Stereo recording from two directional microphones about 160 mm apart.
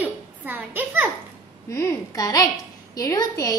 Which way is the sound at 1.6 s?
15° left (ahead or behind).